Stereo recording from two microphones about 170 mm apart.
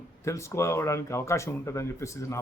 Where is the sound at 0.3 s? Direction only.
15° left (ahead or behind).